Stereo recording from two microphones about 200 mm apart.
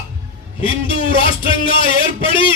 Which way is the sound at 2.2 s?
25° left (ahead or behind).